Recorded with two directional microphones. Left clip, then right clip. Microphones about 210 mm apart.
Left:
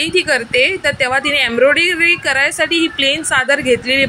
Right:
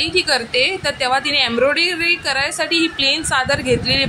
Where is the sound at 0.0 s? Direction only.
15° left (ahead or behind).